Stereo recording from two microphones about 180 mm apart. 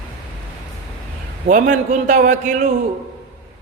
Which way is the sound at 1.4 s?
45° right (ahead or behind).